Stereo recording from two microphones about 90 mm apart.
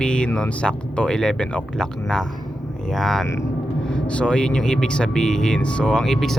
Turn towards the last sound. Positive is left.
turn(degrees=5)  # may be behind; listen again after turning